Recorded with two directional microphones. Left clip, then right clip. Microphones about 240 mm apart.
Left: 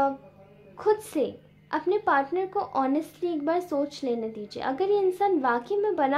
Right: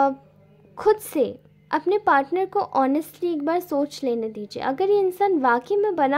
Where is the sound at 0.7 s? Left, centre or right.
Right.